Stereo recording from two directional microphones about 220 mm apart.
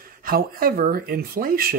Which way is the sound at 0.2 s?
40° right (ahead or behind).